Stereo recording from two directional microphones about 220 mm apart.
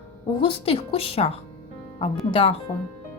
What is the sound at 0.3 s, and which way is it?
Speech, 25° left (ahead or behind).